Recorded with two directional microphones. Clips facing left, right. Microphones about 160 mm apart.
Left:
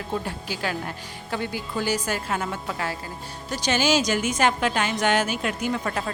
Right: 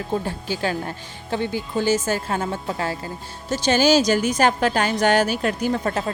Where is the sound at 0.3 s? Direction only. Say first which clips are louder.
Right 4 dB; 30° right (ahead or behind).